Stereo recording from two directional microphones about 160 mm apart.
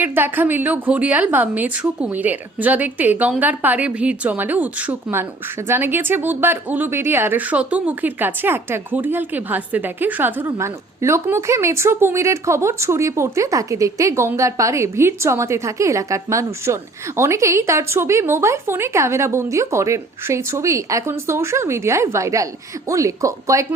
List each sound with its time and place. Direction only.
0.0 s a woman's voice: 15° right (ahead or behind)